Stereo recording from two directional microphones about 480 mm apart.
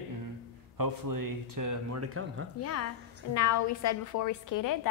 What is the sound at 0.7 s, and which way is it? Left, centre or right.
Speech, right.